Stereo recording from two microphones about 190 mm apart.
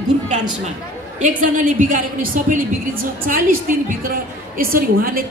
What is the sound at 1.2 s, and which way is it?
Speech, 45° right (ahead or behind).